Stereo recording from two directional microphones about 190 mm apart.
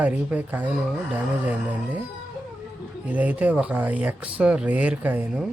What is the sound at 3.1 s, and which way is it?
Speech, 10° right (ahead or behind).